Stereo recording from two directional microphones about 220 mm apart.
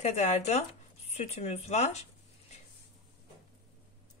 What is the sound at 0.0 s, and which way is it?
Speech, 30° left (ahead or behind).